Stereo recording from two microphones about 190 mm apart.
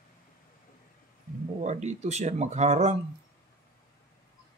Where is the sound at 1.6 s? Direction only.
35° right (ahead or behind).